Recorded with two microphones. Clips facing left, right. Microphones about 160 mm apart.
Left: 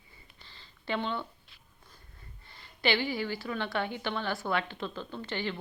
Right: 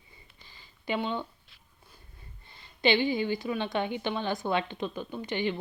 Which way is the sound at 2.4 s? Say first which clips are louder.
Right 4 dB; 20° right (ahead or behind).